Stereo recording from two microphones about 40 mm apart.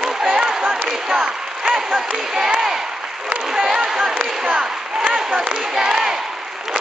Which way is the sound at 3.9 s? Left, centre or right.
Centre.